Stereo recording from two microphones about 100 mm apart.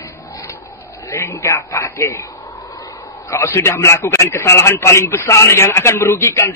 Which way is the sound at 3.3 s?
30° left (ahead or behind).